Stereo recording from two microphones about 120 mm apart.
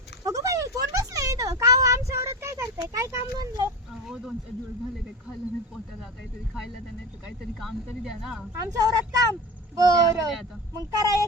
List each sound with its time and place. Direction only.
0.3 s a sound: 25° right (ahead or behind)
7.3 s speech: centre (ahead or behind)
8.5 s speech: 30° right (ahead or behind)